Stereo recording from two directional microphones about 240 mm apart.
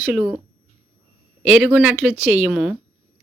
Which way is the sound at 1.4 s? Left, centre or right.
Centre.